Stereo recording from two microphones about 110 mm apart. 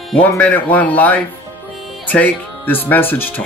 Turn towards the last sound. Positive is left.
turn(degrees=20)  # may be behind; listen again after turning